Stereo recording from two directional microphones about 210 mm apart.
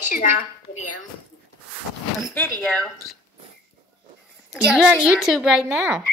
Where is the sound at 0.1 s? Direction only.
40° left (ahead or behind).